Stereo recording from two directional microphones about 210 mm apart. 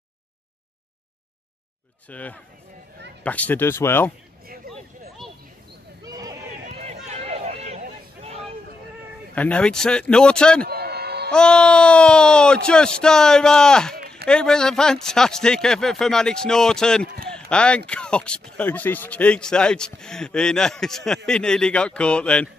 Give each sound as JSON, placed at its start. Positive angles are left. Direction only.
{"t": 2.0, "sound": "speech", "side_deg": 5}
{"t": 4.7, "sound": "a sound", "side_deg": -45}
{"t": 6.0, "sound": "a sound", "side_deg": -15}
{"t": 6.7, "sound": "run", "side_deg": -30}
{"t": 8.2, "sound": "hubbub", "side_deg": -30}
{"t": 9.3, "sound": "speech", "side_deg": 5}
{"t": 10.7, "sound": "music", "side_deg": -50}
{"t": 11.2, "sound": "speech", "side_deg": 5}